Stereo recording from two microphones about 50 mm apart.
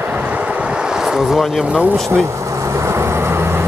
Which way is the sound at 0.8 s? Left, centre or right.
Centre.